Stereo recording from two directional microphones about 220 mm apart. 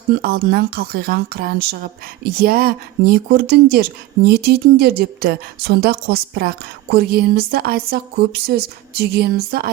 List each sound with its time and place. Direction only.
0.1 s speech: 45° right (ahead or behind)